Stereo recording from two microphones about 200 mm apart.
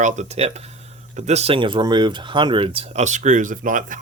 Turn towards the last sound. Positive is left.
turn(degrees=-40)  # may be behind; listen again after turning